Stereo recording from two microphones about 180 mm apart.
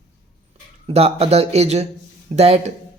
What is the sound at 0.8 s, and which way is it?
Speech, 35° right (ahead or behind).